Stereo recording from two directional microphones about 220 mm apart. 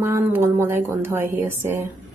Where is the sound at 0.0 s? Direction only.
10° right (ahead or behind).